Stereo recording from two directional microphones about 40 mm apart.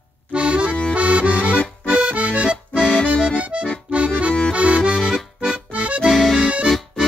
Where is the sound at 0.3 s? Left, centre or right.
Right.